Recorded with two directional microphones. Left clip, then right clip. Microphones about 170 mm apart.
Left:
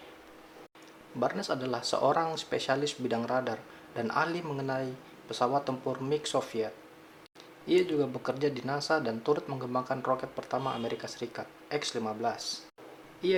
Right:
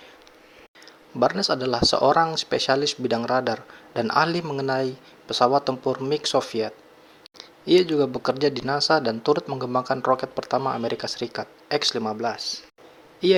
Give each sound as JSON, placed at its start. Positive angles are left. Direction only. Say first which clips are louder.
{"t": 1.2, "sound": "speech", "louder": "right 10 dB", "side_deg": -35}
{"t": 13.2, "sound": "speech", "louder": "right 9 dB", "side_deg": -40}